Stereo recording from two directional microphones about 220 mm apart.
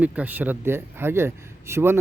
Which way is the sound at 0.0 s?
5° right (ahead or behind).